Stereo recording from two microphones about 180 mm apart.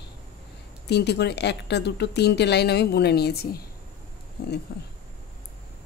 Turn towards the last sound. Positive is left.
turn(degrees=65)  # may be behind; listen again after turning